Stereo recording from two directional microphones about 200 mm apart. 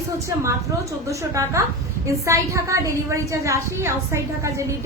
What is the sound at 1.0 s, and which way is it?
A woman's voice, 15° right (ahead or behind).